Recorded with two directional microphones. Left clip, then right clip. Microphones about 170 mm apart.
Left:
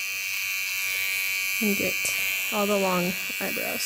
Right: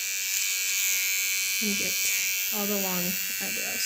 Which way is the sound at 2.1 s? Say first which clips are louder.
Left 3 dB; 90° left.